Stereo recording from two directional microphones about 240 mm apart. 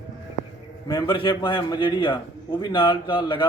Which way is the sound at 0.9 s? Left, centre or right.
Centre.